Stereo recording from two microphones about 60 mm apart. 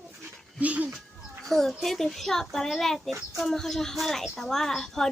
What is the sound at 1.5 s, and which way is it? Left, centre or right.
A woman's voice, centre.